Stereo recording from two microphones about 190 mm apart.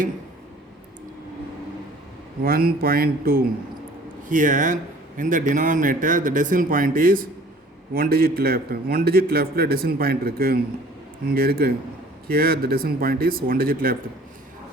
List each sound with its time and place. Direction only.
2.4 s a man's voice: 50° right (ahead or behind)